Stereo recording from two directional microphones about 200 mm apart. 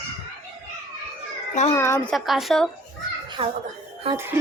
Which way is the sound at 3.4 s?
30° right (ahead or behind).